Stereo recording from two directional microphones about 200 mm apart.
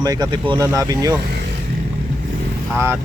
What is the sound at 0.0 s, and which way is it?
Speech, 20° right (ahead or behind).